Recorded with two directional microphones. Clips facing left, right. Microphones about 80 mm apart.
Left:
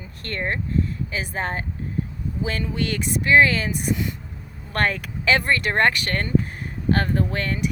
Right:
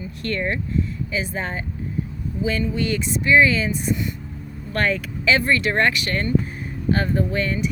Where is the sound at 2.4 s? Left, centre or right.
Left.